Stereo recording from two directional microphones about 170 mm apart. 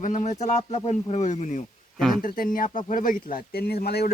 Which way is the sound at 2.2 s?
55° left (ahead or behind).